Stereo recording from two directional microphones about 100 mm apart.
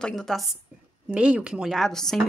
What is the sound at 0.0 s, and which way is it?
Speech, 5° left (ahead or behind).